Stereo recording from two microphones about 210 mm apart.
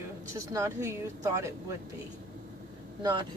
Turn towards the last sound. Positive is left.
turn(degrees=-20)  # may be behind; listen again after turning